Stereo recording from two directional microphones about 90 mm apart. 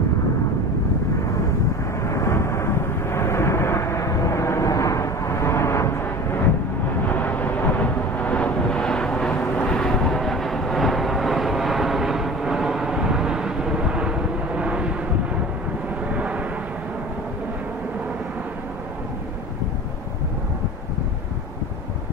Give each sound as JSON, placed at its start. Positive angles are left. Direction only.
{"t": 2.0, "sound": "vehicle", "side_deg": 35}
{"t": 16.1, "sound": "vehicle", "side_deg": -15}